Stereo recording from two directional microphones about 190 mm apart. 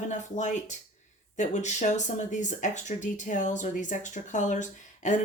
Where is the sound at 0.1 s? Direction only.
40° left (ahead or behind).